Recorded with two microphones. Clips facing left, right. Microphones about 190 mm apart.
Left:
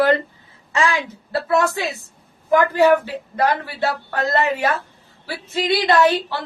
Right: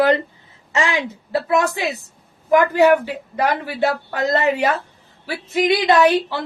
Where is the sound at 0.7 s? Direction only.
20° right (ahead or behind).